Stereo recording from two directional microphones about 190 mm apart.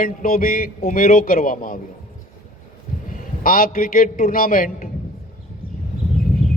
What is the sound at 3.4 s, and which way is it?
Speech, 50° left (ahead or behind).